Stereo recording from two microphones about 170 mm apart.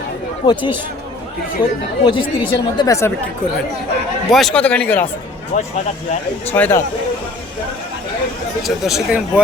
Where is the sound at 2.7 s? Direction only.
20° left (ahead or behind).